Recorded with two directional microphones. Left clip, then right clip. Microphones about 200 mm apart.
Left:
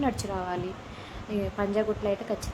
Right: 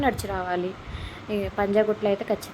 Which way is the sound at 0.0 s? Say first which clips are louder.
Right 4 dB; 15° right (ahead or behind).